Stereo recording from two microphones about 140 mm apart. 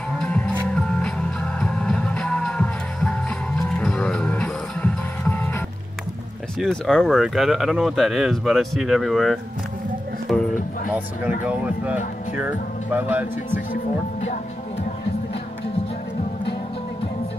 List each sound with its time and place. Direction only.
0.2 s music: 10° left (ahead or behind)
6.6 s speech: 5° left (ahead or behind)
10.3 s music: centre (ahead or behind)
11.4 s speech: 10° right (ahead or behind)